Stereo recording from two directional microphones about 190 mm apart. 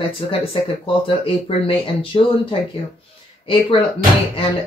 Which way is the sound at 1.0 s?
30° left (ahead or behind).